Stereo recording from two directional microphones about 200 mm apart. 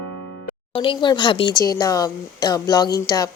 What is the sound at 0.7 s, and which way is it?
Speech, 25° left (ahead or behind).